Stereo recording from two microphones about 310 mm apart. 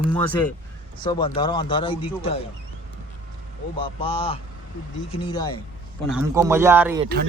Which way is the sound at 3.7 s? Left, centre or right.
Centre.